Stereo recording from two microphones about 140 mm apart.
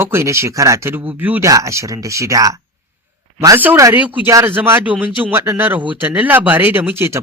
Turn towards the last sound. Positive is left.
turn(degrees=-15)  # may be behind; listen again after turning